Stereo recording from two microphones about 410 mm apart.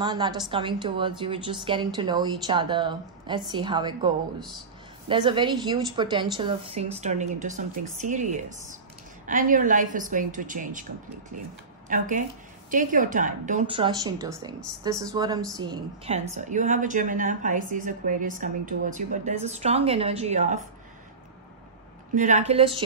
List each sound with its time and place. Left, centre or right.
0.0 s a woman's voice: centre
11.9 s a woman's voice: centre
22.1 s a woman's voice: centre